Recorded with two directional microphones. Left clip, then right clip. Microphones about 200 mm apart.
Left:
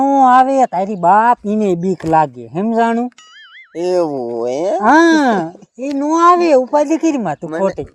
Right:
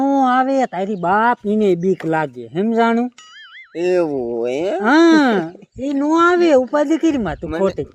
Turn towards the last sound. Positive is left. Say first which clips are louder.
# left 2 dB
turn(degrees=15)  # may be behind; listen again after turning